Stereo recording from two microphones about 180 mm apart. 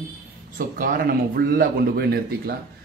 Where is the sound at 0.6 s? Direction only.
50° right (ahead or behind).